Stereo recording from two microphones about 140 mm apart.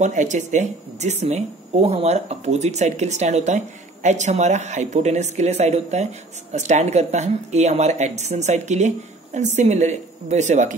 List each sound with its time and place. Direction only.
0.0 s speech: 60° right (ahead or behind)